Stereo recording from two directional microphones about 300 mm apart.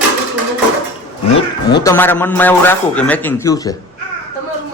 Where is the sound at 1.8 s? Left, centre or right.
Centre.